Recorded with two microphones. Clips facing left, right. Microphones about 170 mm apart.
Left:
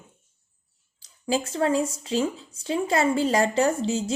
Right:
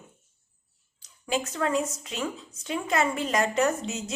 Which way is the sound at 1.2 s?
30° left (ahead or behind).